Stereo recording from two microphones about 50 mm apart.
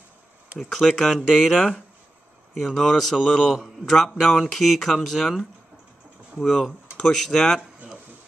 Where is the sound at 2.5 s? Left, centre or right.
Centre.